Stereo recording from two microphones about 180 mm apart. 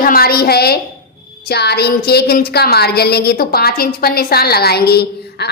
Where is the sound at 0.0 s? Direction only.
55° left (ahead or behind).